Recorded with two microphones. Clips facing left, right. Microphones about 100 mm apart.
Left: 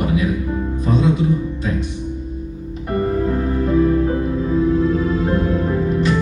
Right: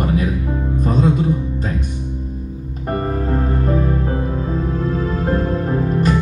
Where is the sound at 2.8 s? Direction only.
40° right (ahead or behind).